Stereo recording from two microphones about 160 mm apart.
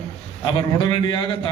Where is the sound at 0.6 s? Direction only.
30° left (ahead or behind).